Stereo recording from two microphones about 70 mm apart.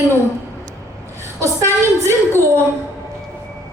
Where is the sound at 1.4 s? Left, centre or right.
Right.